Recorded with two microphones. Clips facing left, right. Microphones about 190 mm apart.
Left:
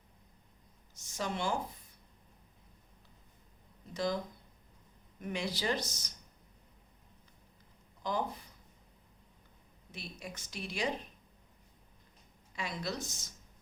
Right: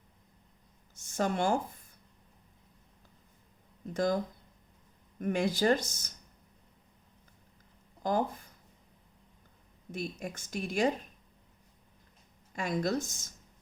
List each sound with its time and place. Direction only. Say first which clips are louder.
0.9 s speech: right 7 dB; 50° right (ahead or behind)
3.9 s a woman's voice: right 5 dB; 50° right (ahead or behind)
5.2 s a woman's voice: right 8 dB; 50° right (ahead or behind)
8.0 s speech: right 5 dB; 45° right (ahead or behind)
9.9 s a woman's voice: right 8 dB; 50° right (ahead or behind)
12.5 s a woman's voice: right 8 dB; 50° right (ahead or behind)